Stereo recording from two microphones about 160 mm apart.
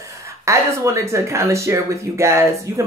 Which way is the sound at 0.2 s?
20° right (ahead or behind).